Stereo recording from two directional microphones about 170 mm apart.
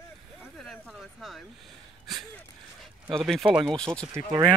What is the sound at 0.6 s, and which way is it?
Music, centre (ahead or behind).